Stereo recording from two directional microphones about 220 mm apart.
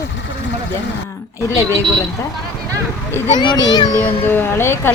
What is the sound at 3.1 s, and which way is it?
A child's voice, 20° left (ahead or behind).